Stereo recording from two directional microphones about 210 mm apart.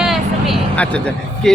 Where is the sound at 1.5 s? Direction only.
5° left (ahead or behind).